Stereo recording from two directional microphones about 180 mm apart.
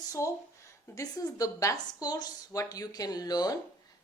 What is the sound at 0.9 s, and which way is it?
A woman's voice, 20° left (ahead or behind).